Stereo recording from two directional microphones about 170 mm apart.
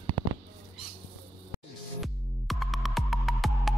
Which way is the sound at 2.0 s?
Centre (ahead or behind).